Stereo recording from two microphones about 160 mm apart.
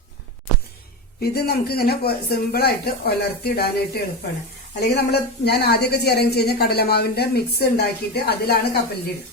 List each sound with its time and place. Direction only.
1.2 s speech: 80° left
4.8 s speech: 90° left